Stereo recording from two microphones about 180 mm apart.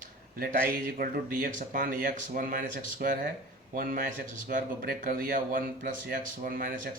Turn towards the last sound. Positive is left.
turn(degrees=-50)  # may be behind; listen again after turning